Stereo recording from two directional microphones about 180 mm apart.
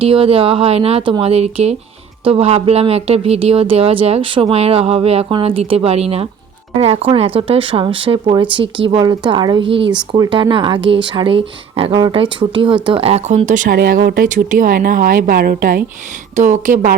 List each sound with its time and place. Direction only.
0.0 s speech: 30° right (ahead or behind)
13.7 s speech: 60° right (ahead or behind); by 16.9 s 45° right (ahead or behind)